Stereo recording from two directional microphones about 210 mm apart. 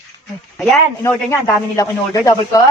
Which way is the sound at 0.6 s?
10° left (ahead or behind).